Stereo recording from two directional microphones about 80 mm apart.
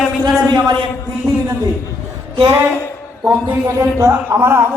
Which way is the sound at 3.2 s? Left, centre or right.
Right.